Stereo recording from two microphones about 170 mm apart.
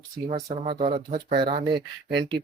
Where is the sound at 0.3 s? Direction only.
40° right (ahead or behind).